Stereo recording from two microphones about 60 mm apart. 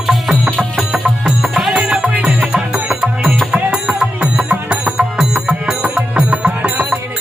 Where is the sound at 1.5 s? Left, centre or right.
Centre.